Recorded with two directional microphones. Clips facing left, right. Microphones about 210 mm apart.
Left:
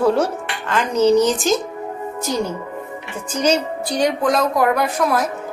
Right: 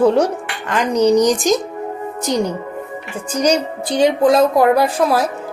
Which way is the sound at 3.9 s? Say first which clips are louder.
Right 5 dB; 25° right (ahead or behind).